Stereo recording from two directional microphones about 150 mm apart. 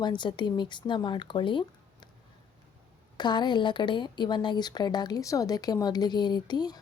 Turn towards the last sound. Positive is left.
turn(degrees=30)  # may be behind; listen again after turning